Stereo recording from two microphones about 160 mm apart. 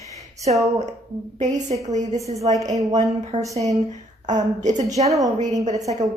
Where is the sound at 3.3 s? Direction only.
30° right (ahead or behind).